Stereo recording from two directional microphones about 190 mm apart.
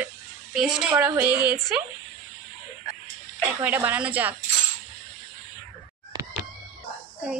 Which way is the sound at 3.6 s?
10° right (ahead or behind).